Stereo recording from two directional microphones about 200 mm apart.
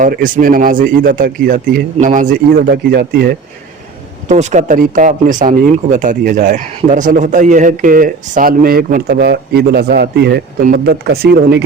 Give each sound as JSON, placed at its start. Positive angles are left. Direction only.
{"t": 0.0, "sound": "speech", "side_deg": -40}
{"t": 4.3, "sound": "speech", "side_deg": -35}